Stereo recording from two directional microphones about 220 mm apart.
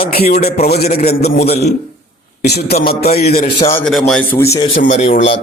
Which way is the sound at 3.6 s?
10° left (ahead or behind).